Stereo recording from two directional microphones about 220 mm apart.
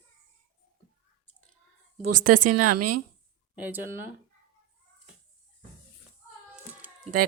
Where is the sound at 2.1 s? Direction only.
90° right.